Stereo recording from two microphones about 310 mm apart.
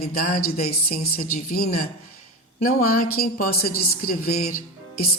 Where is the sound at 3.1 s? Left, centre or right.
Left.